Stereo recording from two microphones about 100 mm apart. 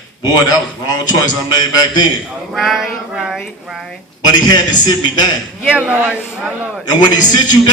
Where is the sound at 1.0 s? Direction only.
40° left (ahead or behind).